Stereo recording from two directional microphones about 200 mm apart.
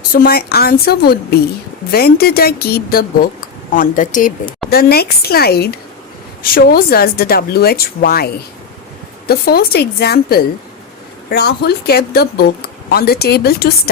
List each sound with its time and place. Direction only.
0.1 s speech: 50° left (ahead or behind)